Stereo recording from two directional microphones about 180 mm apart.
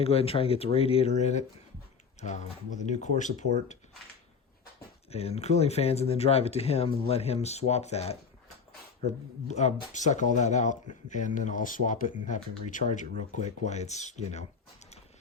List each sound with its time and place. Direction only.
0.0 s speech: 35° left (ahead or behind)
2.9 s speech: 40° left (ahead or behind)
5.1 s speech: 35° left (ahead or behind)